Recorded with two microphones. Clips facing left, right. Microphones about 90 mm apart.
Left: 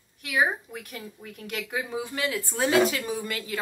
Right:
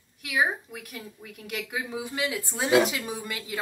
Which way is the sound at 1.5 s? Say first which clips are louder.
Left 1 dB; 5° right (ahead or behind).